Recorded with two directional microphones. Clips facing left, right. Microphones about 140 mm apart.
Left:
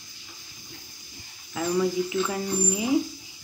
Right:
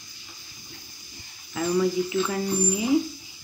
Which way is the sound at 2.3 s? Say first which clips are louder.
Right 2 dB; 15° left (ahead or behind).